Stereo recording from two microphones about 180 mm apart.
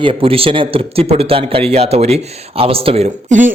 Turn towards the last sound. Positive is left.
turn(degrees=-45)  # may be behind; listen again after turning